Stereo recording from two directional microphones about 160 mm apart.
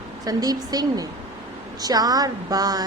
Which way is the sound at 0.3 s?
25° right (ahead or behind).